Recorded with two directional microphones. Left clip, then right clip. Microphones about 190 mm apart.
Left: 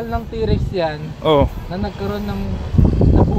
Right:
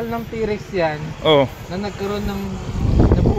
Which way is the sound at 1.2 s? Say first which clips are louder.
Even; 15° left (ahead or behind).